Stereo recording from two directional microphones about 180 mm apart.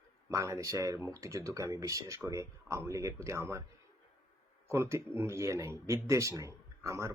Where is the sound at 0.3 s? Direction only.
15° right (ahead or behind).